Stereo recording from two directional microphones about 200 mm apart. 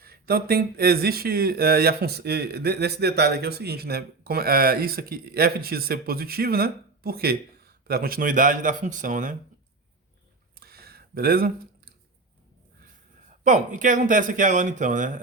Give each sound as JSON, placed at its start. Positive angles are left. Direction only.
{"t": 0.0, "sound": "speech", "side_deg": -50}
{"t": 10.6, "sound": "a sound", "side_deg": -50}
{"t": 13.4, "sound": "speech", "side_deg": -40}